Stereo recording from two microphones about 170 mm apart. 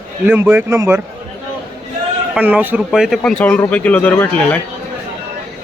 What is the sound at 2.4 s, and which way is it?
Speech, 10° right (ahead or behind).